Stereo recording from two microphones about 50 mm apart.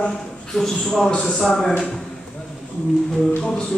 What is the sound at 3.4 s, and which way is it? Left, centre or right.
Speech, left.